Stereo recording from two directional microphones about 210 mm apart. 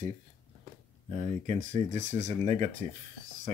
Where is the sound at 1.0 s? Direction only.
30° right (ahead or behind).